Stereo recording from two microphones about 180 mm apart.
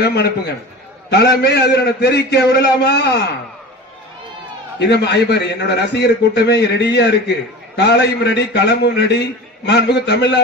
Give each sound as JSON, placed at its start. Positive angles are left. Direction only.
{"t": 0.0, "sound": "a man's voice", "side_deg": 65}
{"t": 4.7, "sound": "a man's voice", "side_deg": 70}